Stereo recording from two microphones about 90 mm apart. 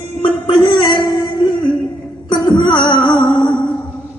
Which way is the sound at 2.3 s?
55° left (ahead or behind).